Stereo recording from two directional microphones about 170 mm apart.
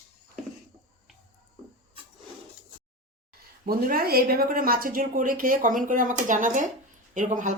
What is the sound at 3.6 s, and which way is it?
Speech, 60° right (ahead or behind).